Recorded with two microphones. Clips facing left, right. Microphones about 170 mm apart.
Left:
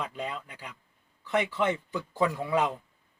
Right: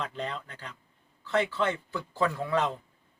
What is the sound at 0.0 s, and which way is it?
A man's voice, 10° left (ahead or behind).